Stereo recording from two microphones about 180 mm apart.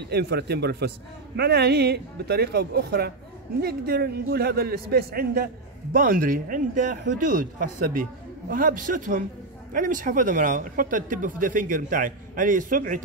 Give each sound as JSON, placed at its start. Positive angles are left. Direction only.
{"t": 0.1, "sound": "a man's voice", "side_deg": -65}